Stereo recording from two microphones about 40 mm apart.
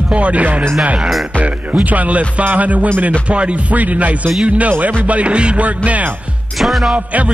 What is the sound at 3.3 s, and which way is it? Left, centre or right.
Speech, right.